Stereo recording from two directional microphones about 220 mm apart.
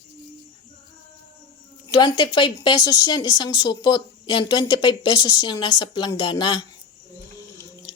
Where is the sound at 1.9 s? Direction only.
20° left (ahead or behind).